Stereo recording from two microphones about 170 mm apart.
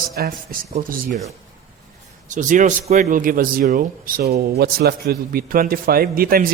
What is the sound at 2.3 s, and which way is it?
Speech, 50° right (ahead or behind).